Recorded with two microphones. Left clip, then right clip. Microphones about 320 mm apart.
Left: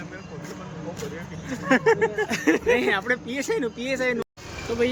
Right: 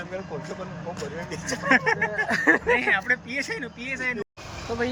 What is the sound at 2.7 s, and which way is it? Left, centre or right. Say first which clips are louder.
Speech: even; centre.